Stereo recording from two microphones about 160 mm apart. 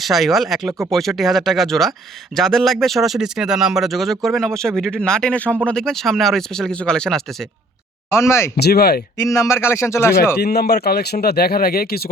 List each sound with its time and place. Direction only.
0.0 s speech: centre (ahead or behind)
8.1 s speech: 15° left (ahead or behind)
8.5 s speech: 85° left
9.1 s speech: 20° left (ahead or behind)
10.4 s speech: 85° left